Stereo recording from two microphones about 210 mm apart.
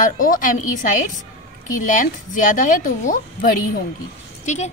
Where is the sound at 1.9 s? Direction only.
40° left (ahead or behind).